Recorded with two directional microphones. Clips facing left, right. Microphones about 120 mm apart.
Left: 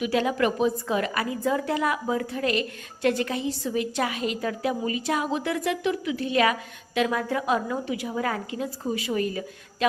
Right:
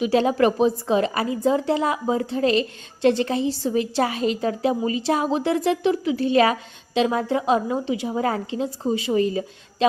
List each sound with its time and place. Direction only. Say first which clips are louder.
0.0 s a woman's voice: right 5 dB; 30° right (ahead or behind)